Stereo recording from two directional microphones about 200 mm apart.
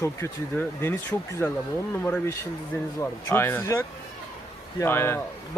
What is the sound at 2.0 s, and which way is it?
Speech, 5° left (ahead or behind).